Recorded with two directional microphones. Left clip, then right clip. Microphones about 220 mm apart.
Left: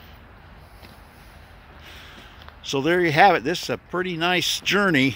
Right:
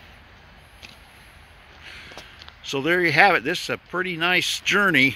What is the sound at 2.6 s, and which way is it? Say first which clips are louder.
Speech: even; 5° left (ahead or behind).